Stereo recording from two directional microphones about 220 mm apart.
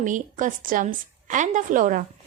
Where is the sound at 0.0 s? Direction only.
35° right (ahead or behind).